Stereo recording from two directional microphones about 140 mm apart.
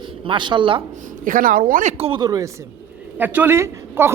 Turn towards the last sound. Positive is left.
turn(degrees=-15)  # may be behind; listen again after turning